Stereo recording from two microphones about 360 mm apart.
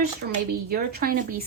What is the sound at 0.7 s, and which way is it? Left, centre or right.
Speech, right.